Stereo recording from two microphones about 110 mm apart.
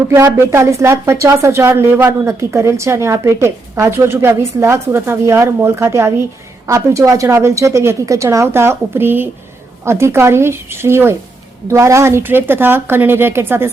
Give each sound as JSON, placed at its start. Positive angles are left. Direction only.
{"t": 0.3, "sound": "speech", "side_deg": -25}